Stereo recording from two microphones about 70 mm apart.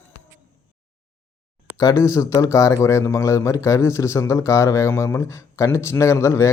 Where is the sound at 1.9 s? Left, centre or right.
Left.